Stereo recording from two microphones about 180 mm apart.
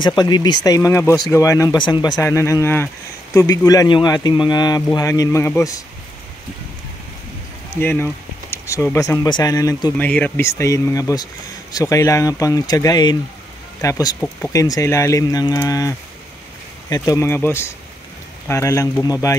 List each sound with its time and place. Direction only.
0.0 s speech: 25° left (ahead or behind)
7.7 s speech: 10° left (ahead or behind)
9.9 s speech: 10° left (ahead or behind)